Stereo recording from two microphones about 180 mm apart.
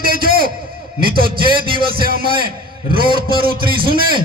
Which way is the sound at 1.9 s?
55° right (ahead or behind).